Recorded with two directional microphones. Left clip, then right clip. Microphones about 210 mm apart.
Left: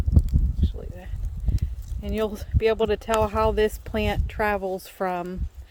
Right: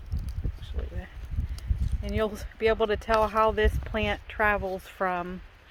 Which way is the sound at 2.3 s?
90° left.